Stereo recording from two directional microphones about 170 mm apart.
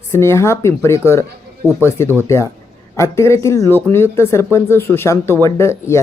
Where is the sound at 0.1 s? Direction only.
15° left (ahead or behind).